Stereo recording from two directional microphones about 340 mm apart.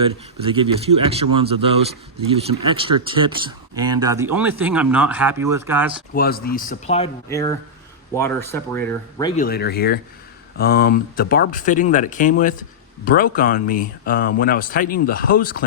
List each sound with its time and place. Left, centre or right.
0.4 s speech: centre
2.7 s speech: centre
6.1 s speech: left; by 9.4 s centre
9.4 s speech: left